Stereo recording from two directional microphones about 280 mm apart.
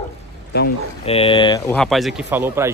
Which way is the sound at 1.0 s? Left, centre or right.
Centre.